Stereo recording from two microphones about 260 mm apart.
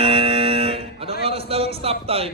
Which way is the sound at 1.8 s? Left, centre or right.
Right.